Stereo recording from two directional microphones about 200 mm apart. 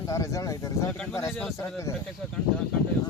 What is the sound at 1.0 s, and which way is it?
Speech, 5° left (ahead or behind).